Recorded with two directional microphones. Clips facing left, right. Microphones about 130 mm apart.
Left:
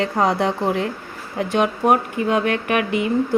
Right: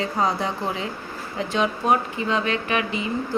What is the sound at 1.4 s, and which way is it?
A woman's voice, 55° left (ahead or behind).